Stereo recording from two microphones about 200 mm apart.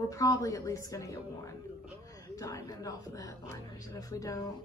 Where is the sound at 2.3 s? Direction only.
15° left (ahead or behind).